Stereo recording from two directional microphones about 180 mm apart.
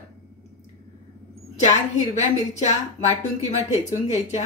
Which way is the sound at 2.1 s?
40° left (ahead or behind).